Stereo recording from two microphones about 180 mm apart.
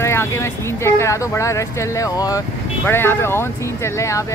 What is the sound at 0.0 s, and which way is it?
Speech, 15° left (ahead or behind).